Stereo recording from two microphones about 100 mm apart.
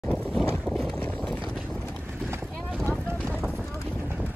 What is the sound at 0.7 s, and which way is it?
Run, centre (ahead or behind).